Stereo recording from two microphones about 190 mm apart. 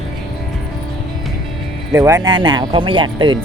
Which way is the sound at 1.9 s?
15° right (ahead or behind).